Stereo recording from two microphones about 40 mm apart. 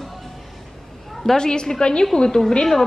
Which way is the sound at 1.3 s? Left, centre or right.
Centre.